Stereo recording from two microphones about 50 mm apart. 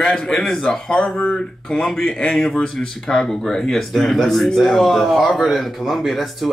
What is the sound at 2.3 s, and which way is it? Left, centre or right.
Speech, centre.